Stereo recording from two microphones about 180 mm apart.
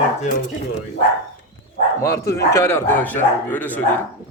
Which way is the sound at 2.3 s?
15° left (ahead or behind).